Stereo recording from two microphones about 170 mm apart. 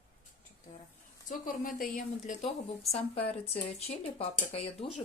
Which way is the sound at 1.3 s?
55° left (ahead or behind).